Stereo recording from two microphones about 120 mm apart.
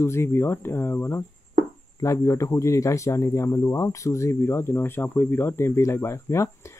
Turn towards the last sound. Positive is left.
turn(degrees=25)  # may be behind; listen again after turning